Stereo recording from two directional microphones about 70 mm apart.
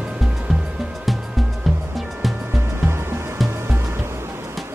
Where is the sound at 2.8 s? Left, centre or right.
Right.